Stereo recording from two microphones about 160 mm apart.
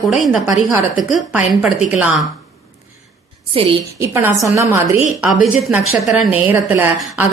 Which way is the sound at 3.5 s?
35° right (ahead or behind).